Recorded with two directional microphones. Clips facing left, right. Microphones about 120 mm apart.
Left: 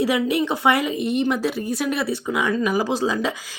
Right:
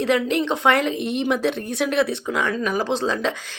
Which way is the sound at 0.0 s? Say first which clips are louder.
Even; 10° left (ahead or behind).